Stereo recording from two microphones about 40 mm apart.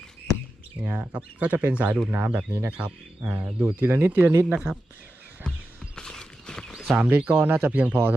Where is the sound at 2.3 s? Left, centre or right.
Right.